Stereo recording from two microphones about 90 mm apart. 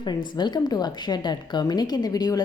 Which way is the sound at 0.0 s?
55° left (ahead or behind).